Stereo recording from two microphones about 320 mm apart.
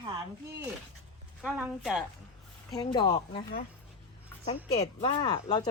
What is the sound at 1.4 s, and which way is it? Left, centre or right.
Speech, centre.